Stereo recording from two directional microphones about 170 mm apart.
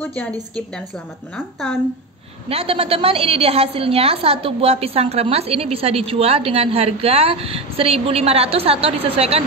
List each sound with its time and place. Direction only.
1.3 s a woman's voice: 5° left (ahead or behind)
2.5 s a woman's voice: 35° right (ahead or behind)